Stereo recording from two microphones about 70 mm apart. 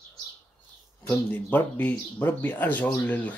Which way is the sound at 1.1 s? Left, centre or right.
Left.